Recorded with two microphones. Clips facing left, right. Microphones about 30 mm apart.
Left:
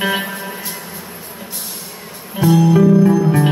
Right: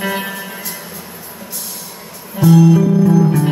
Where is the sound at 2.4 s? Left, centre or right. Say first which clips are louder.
Right 2 dB; left.